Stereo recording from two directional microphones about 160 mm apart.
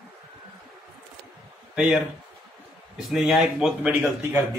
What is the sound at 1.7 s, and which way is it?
Speech, 5° right (ahead or behind).